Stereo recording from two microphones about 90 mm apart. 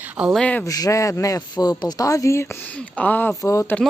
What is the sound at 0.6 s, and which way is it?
Speech, 40° left (ahead or behind).